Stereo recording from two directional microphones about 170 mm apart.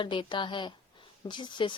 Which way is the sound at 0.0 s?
30° left (ahead or behind).